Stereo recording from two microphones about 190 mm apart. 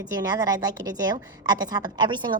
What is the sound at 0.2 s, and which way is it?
A woman's voice, 20° right (ahead or behind).